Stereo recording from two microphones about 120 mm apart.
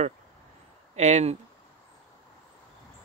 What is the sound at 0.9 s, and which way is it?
Speech, 70° right (ahead or behind).